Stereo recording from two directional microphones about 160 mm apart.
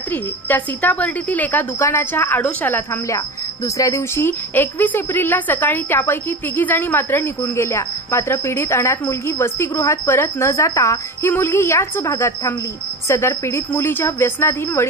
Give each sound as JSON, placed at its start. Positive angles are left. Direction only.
{"t": 0.1, "sound": "a woman's voice", "side_deg": 10}